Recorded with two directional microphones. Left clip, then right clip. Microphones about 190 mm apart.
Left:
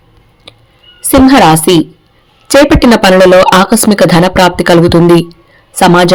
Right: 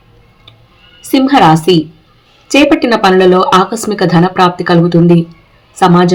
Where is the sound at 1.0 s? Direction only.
50° left (ahead or behind).